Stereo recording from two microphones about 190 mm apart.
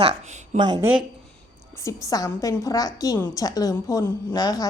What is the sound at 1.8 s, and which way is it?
A woman's voice, 15° left (ahead or behind).